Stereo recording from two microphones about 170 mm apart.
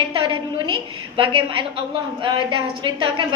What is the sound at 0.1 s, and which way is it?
A woman's voice, 30° right (ahead or behind).